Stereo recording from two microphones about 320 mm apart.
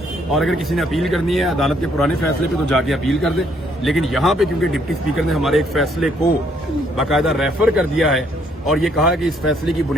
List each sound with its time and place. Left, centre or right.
0.3 s speech: centre